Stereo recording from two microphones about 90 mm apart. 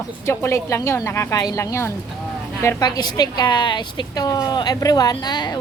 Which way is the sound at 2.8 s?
50° left (ahead or behind).